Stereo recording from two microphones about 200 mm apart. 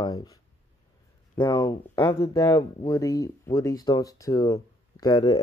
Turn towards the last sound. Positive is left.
turn(degrees=20)  # may be behind; listen again after turning